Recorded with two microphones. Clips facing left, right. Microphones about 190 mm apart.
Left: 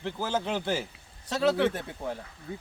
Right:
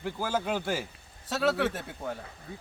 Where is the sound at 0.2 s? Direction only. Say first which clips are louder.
Left 1 dB; 25° left (ahead or behind).